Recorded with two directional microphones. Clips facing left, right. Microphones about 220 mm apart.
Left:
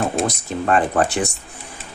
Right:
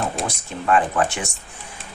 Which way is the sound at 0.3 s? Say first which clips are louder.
Left 2 dB; 35° left (ahead or behind).